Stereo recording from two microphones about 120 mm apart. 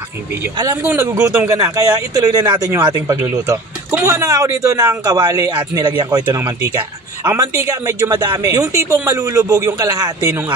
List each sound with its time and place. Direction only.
0.8 s speech: 20° right (ahead or behind)